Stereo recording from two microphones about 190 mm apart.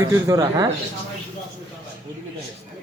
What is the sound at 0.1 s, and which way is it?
Speech, 15° right (ahead or behind).